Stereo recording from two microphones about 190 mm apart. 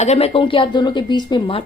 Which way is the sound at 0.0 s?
35° left (ahead or behind).